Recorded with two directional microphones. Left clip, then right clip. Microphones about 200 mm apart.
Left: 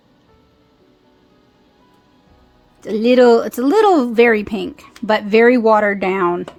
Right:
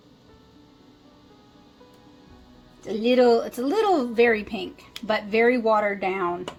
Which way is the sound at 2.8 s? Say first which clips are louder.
Left 8 dB; 50° left (ahead or behind).